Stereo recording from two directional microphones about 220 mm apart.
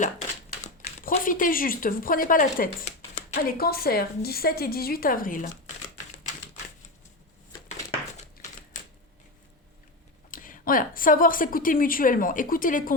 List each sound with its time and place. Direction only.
0.6 s a woman's voice: 35° left (ahead or behind)
10.3 s a woman's voice: 40° left (ahead or behind)